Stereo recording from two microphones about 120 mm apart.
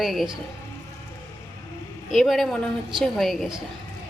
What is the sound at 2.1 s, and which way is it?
A woman's voice, centre (ahead or behind).